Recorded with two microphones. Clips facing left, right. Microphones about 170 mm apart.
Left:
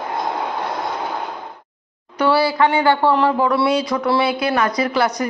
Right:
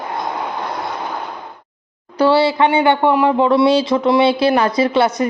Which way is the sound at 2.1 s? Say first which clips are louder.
Right 3 dB; 30° right (ahead or behind).